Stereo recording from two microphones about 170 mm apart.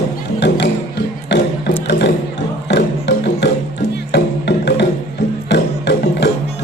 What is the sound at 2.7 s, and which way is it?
Music, 90° left.